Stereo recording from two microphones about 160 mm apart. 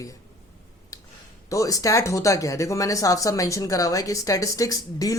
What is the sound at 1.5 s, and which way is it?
Speech, 20° left (ahead or behind).